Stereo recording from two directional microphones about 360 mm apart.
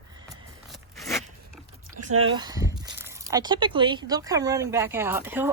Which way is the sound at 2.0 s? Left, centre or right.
Right.